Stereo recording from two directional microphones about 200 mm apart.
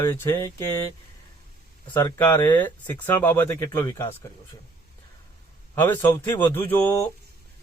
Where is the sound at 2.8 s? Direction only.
10° left (ahead or behind).